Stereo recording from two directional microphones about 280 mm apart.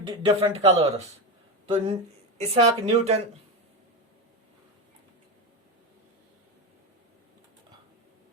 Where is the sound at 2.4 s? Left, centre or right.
Right.